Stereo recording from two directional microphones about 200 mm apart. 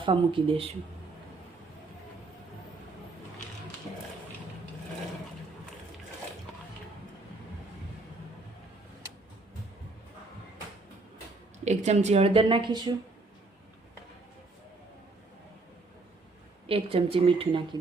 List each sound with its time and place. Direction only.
0.0 s a woman's voice: 25° right (ahead or behind)
11.6 s speech: 35° right (ahead or behind)
16.6 s a woman's voice: 30° right (ahead or behind)